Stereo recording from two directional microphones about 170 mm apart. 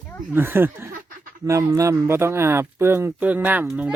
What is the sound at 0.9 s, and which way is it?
Snicker, 55° right (ahead or behind).